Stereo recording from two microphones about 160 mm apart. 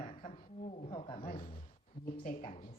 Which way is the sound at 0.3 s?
45° left (ahead or behind).